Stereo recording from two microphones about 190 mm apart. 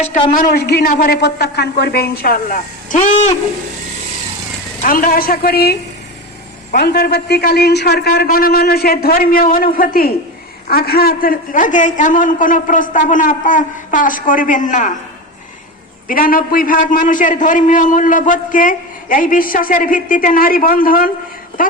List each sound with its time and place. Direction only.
0.0 s a man's voice: 45° left (ahead or behind)
4.8 s a man's voice: 45° left (ahead or behind)
16.0 s a man's voice: 50° left (ahead or behind)